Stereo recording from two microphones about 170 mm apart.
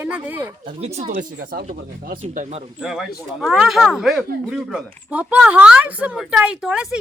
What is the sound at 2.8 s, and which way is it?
Speech, centre (ahead or behind).